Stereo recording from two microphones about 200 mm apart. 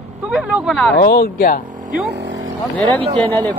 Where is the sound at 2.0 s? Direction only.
60° right (ahead or behind).